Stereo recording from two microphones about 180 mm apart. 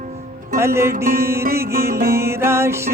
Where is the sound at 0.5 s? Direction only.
15° right (ahead or behind).